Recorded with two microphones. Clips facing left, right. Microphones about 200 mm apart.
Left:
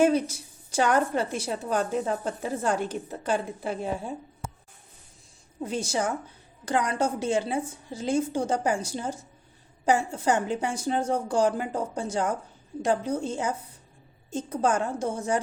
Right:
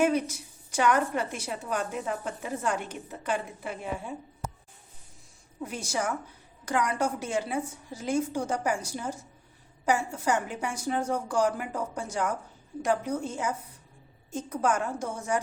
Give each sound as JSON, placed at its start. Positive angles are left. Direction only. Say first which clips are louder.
{"t": 0.0, "sound": "a woman's voice", "louder": "left 3 dB", "side_deg": 30}
{"t": 5.5, "sound": "a woman's voice", "louder": "left 4 dB", "side_deg": 25}